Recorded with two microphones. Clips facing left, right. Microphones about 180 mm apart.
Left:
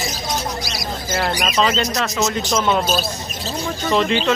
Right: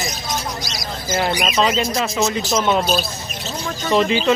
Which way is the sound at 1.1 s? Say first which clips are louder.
Right 2 dB; 5° right (ahead or behind).